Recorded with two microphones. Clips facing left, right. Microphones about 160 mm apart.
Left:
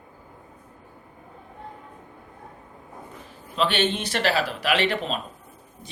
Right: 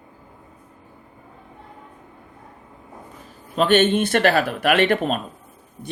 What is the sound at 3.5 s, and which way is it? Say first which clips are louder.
Speech: right 7 dB; 50° right (ahead or behind).